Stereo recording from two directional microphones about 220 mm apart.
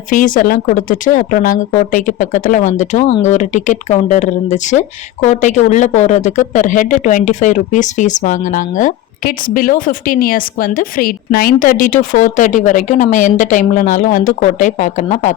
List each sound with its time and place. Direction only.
0.1 s speech: 35° left (ahead or behind)